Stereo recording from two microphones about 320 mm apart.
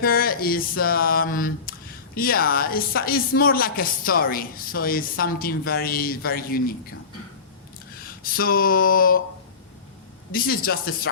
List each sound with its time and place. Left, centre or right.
0.0 s speech: left
8.2 s speech: left
10.3 s speech: left